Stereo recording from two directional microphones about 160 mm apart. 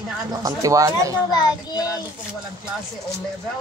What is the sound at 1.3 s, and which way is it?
Speech, 25° left (ahead or behind).